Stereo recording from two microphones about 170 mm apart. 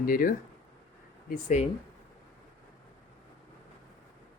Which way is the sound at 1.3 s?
45° left (ahead or behind).